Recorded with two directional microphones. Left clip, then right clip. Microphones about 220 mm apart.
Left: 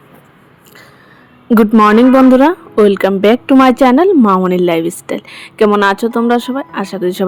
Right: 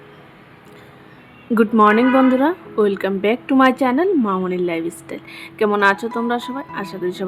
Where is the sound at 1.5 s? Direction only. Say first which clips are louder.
Left 5 dB; 25° left (ahead or behind).